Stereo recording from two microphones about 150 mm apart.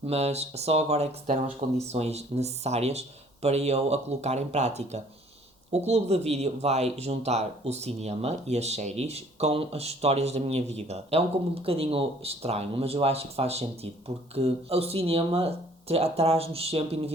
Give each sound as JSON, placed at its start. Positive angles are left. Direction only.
{"t": 0.0, "sound": "speech", "side_deg": -45}